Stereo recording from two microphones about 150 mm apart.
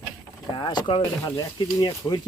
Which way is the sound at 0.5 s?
30° left (ahead or behind).